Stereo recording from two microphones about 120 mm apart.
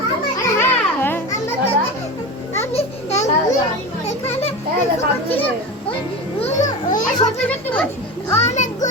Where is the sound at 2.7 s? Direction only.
65° left (ahead or behind).